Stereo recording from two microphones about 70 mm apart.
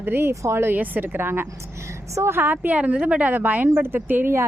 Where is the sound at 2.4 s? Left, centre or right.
Right.